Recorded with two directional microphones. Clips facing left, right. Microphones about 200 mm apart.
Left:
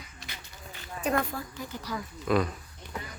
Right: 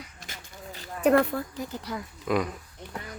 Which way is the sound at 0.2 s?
40° right (ahead or behind).